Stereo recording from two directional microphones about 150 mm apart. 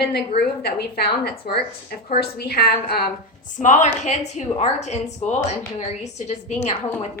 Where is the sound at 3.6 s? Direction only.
55° left (ahead or behind).